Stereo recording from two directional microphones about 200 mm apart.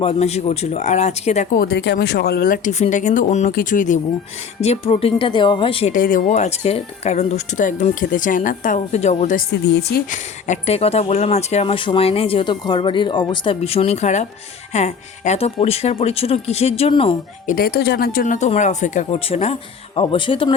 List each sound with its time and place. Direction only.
0.0 s speech: 30° left (ahead or behind)
1.5 s speech: 55° left (ahead or behind); by 5.9 s 25° left (ahead or behind)
5.9 s speech: 45° left (ahead or behind)
9.5 s speech: 55° left (ahead or behind)
10.1 s speech: 35° left (ahead or behind)
17.4 s speech: 45° left (ahead or behind); by 20.5 s 25° left (ahead or behind)